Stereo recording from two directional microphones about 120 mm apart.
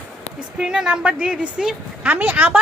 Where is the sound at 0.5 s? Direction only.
10° right (ahead or behind).